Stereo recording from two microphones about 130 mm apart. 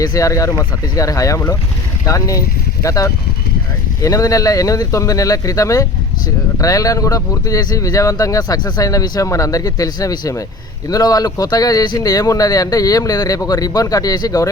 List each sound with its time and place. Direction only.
0.0 s speech: 25° left (ahead or behind)